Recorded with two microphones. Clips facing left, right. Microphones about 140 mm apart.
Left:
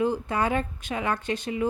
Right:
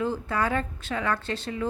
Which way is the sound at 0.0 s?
20° left (ahead or behind).